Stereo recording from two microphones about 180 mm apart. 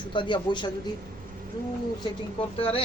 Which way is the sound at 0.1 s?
25° left (ahead or behind).